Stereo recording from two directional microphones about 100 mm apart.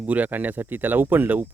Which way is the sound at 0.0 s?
15° right (ahead or behind).